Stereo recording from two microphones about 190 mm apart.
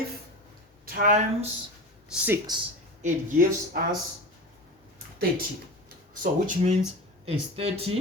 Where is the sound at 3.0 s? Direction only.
45° right (ahead or behind).